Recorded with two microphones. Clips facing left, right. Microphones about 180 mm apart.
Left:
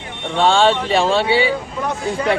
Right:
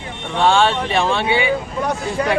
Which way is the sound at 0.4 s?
30° left (ahead or behind).